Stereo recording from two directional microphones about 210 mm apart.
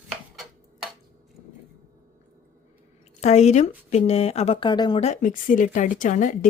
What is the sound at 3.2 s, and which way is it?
Speech, 30° left (ahead or behind).